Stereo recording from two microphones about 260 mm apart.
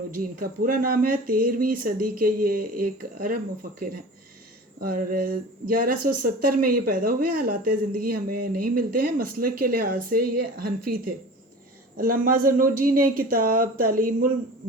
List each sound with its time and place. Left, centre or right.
0.1 s speech: right
4.8 s speech: right